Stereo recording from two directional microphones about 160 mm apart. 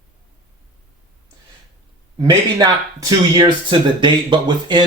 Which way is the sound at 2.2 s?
25° right (ahead or behind).